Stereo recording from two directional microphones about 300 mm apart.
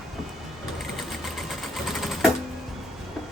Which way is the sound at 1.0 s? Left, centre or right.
Centre.